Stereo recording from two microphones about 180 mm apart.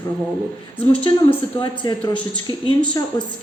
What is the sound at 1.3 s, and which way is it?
A woman's voice, 25° left (ahead or behind).